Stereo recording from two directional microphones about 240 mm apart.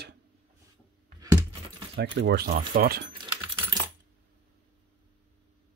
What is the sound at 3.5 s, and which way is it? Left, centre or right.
Coin, centre.